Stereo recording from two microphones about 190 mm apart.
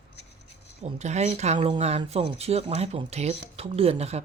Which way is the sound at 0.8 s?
35° right (ahead or behind).